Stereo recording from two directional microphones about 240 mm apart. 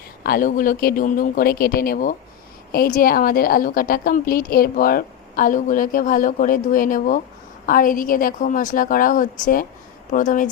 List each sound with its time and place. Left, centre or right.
0.2 s a woman's voice: left